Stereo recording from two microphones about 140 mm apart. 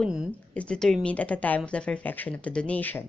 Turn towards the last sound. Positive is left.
turn(degrees=15)  # may be behind; listen again after turning